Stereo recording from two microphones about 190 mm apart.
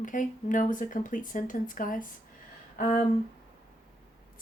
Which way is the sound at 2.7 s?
45° left (ahead or behind).